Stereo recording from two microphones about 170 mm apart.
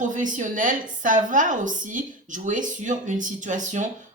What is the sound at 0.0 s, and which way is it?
Speech, 50° right (ahead or behind).